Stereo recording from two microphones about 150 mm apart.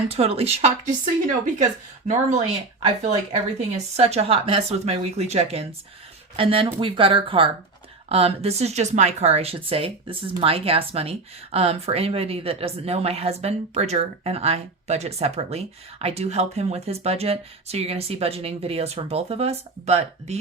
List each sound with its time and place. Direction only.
0.1 s speech: 40° right (ahead or behind)
2.0 s speech: 50° right (ahead or behind)